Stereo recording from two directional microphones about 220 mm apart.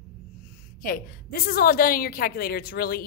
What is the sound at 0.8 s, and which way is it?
A woman's voice, 40° left (ahead or behind).